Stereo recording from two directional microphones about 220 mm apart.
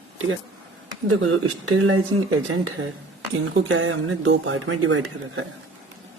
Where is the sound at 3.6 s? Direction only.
65° right (ahead or behind).